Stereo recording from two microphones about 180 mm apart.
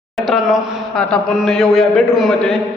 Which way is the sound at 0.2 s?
Centre (ahead or behind).